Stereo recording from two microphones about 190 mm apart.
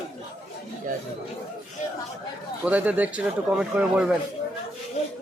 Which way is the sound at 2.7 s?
10° right (ahead or behind).